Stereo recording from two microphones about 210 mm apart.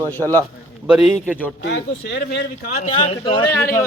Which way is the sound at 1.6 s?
55° left (ahead or behind).